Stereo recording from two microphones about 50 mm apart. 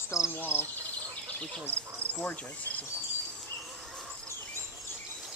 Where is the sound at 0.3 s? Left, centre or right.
Left.